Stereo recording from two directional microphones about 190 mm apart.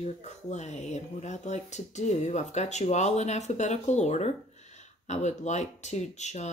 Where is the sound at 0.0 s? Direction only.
35° left (ahead or behind).